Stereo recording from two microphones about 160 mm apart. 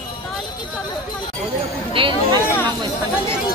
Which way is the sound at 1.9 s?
35° right (ahead or behind).